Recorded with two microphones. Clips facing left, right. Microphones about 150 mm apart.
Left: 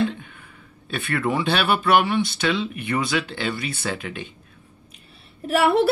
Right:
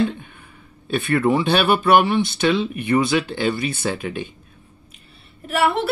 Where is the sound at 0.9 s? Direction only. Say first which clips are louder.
Right 6 dB; 30° right (ahead or behind).